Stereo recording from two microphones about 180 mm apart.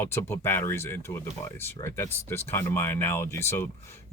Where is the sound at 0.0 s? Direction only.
15° left (ahead or behind).